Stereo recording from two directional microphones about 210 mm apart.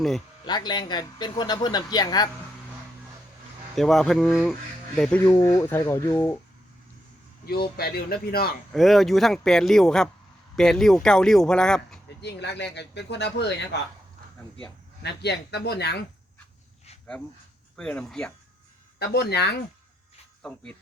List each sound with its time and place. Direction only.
0.4 s speech: 20° left (ahead or behind)
3.8 s speech: centre (ahead or behind)
5.2 s speech: 15° left (ahead or behind)
7.4 s speech: 45° left (ahead or behind)
8.7 s speech: centre (ahead or behind)
12.2 s speech: 55° left (ahead or behind)
15.0 s speech: 55° left (ahead or behind)
17.7 s speech: 5° left (ahead or behind)
18.9 s speech: 50° left (ahead or behind)